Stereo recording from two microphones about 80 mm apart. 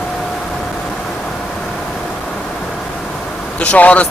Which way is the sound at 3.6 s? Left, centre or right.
Centre.